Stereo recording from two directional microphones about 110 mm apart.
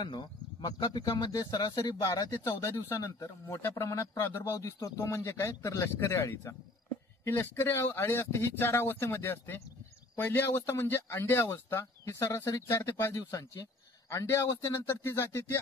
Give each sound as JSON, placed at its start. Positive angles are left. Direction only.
{"t": 0.0, "sound": "speech", "side_deg": 40}